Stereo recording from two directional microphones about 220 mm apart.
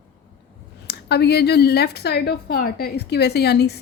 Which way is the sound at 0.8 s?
50° left (ahead or behind).